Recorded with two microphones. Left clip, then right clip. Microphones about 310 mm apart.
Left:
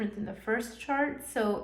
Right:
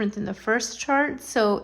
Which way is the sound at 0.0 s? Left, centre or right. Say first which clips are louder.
Right 8 dB; right.